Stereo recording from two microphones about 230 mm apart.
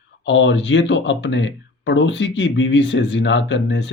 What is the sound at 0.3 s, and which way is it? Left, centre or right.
Speech, left.